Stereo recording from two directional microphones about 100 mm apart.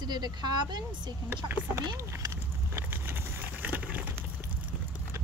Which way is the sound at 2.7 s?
20° right (ahead or behind).